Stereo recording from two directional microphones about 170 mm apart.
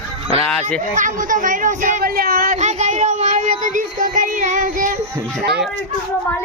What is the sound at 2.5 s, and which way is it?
Child singing, 45° right (ahead or behind).